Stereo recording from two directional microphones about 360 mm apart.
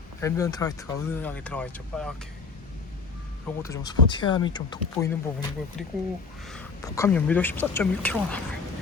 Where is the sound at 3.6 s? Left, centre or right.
Centre.